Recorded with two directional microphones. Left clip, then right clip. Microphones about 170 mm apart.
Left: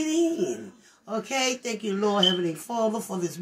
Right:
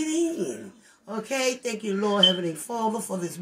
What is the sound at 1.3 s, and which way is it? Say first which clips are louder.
Speech: right 1 dB; 15° left (ahead or behind).